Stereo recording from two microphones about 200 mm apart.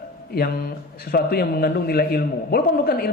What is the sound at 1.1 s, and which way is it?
A man's voice, 50° left (ahead or behind).